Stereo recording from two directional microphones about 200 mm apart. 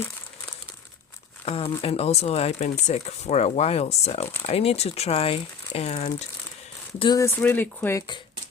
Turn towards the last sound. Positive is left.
turn(degrees=10)  # may be behind; listen again after turning